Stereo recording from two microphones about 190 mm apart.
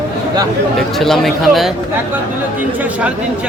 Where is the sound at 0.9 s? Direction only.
Centre (ahead or behind).